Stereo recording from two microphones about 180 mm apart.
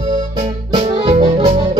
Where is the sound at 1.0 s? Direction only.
35° right (ahead or behind).